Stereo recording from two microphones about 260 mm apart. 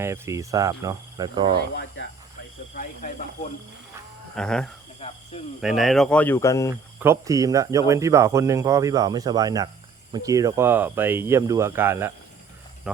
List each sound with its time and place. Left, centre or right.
0.0 s speech: centre
4.4 s speech: centre
4.9 s cricket: left
5.5 s speech: centre
7.0 s speech: centre